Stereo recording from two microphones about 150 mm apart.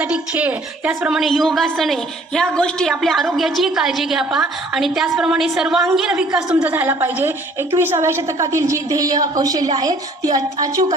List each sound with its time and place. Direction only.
0.0 s a woman's voice: 10° right (ahead or behind)